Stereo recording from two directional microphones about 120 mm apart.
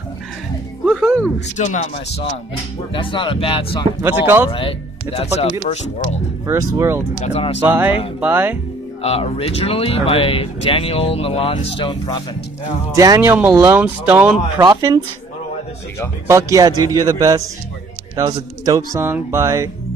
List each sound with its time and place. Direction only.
0.8 s music: 5° right (ahead or behind)
1.6 s speech: 70° left (ahead or behind)
2.9 s speech: 45° left (ahead or behind)
4.0 s speech: 20° right (ahead or behind)
4.5 s speech: 50° left (ahead or behind)
5.1 s speech: 60° left (ahead or behind)
6.4 s speech: 25° right (ahead or behind)
7.2 s speech: 75° left (ahead or behind)
7.6 s speech: 15° right (ahead or behind)
9.0 s speech: 55° left (ahead or behind)
11.8 s speech: 40° left (ahead or behind)
12.9 s speech: 30° right (ahead or behind)
14.6 s a man's voice: 30° right (ahead or behind)
16.3 s a man's voice: 25° right (ahead or behind)